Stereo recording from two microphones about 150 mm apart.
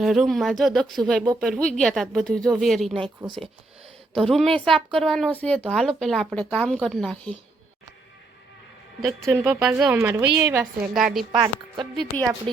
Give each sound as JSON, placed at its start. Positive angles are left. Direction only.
{"t": 0.0, "sound": "speech", "side_deg": 0}
{"t": 3.2, "sound": "speech", "side_deg": -35}
{"t": 4.1, "sound": "speech", "side_deg": 0}
{"t": 9.0, "sound": "speech", "side_deg": 0}
{"t": 9.3, "sound": "a woman's voice", "side_deg": -15}
{"t": 10.6, "sound": "speech", "side_deg": 0}
{"t": 11.3, "sound": "a woman's voice", "side_deg": -30}